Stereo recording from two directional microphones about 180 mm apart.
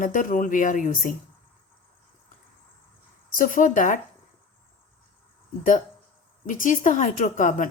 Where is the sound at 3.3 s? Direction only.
50° left (ahead or behind).